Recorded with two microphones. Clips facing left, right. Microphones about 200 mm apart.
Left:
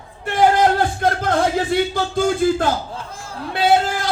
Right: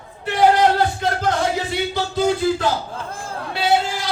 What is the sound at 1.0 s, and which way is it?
Music, 55° left (ahead or behind).